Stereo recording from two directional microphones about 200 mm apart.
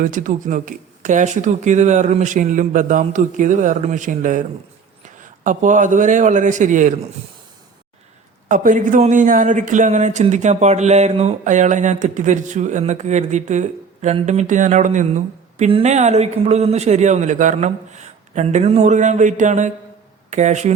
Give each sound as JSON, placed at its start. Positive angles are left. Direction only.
{"t": 0.0, "sound": "speech", "side_deg": -40}
{"t": 8.4, "sound": "speech", "side_deg": -40}